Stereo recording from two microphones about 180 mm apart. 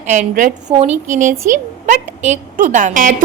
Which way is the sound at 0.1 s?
45° right (ahead or behind).